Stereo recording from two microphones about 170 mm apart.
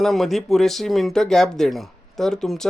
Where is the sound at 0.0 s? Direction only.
Centre (ahead or behind).